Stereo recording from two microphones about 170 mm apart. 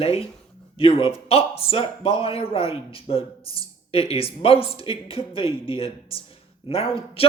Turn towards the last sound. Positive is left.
turn(degrees=35)  # may be behind; listen again after turning